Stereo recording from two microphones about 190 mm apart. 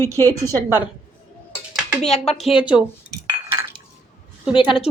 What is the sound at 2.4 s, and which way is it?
Speech, 5° right (ahead or behind).